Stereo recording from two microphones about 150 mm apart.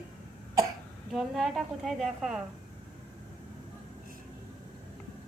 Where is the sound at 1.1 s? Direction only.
Centre (ahead or behind).